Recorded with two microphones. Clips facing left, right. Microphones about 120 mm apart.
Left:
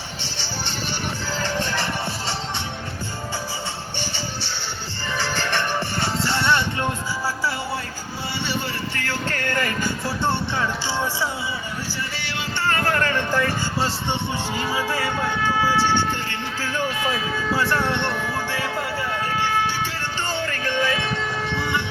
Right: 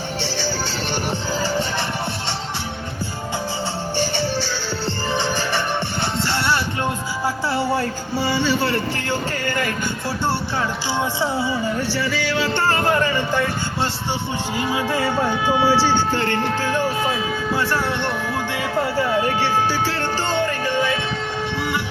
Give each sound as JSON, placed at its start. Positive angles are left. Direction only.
{"t": 1.4, "sound": "music", "side_deg": -10}
{"t": 5.1, "sound": "music", "side_deg": -20}
{"t": 6.2, "sound": "music", "side_deg": 0}
{"t": 9.4, "sound": "music", "side_deg": 0}
{"t": 12.8, "sound": "speech", "side_deg": -15}
{"t": 14.5, "sound": "music", "side_deg": -15}
{"t": 16.3, "sound": "speech", "side_deg": -50}
{"t": 17.5, "sound": "speech", "side_deg": 0}